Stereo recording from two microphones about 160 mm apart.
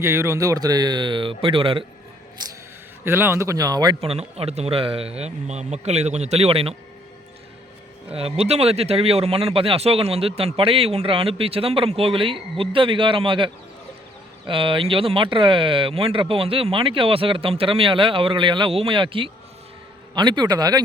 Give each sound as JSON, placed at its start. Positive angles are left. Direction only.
{"t": 0.0, "sound": "speech", "side_deg": -15}
{"t": 3.0, "sound": "speech", "side_deg": -15}
{"t": 4.0, "sound": "speech", "side_deg": -40}
{"t": 8.1, "sound": "speech", "side_deg": -40}